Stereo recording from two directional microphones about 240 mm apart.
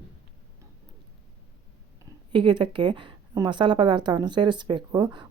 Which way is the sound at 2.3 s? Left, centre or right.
Centre.